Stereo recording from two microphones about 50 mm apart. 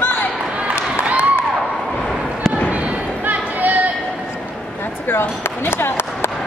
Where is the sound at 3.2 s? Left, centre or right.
Right.